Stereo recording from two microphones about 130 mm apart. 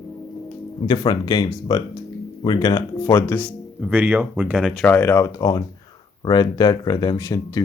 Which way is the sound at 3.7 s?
5° right (ahead or behind).